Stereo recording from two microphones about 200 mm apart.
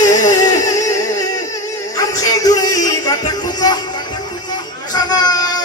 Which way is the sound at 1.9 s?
15° left (ahead or behind).